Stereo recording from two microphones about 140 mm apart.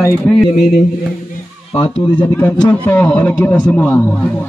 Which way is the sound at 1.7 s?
45° left (ahead or behind).